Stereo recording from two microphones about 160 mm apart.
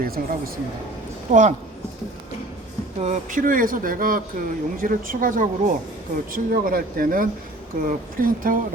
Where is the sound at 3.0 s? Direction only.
50° right (ahead or behind).